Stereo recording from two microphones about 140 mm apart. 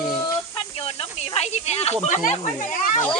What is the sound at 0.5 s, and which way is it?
Snake, 40° left (ahead or behind).